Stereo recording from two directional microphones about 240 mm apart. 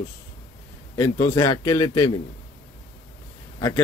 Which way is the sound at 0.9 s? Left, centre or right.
Centre.